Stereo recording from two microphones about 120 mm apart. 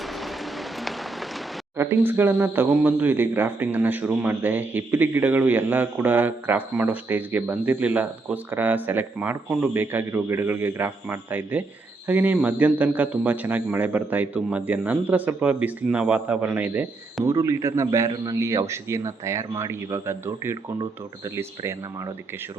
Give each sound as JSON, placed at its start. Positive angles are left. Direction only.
{"t": 1.8, "sound": "speech", "side_deg": -20}
{"t": 17.2, "sound": "a man's voice", "side_deg": -25}